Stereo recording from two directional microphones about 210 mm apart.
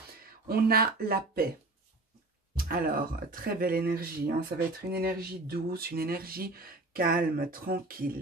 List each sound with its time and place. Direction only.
0.2 s speech: 45° right (ahead or behind)
2.5 s speech: 45° right (ahead or behind)